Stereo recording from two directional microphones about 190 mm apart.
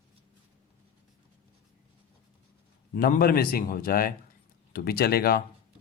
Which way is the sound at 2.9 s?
50° left (ahead or behind).